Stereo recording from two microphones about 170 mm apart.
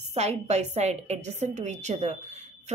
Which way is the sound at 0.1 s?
40° right (ahead or behind).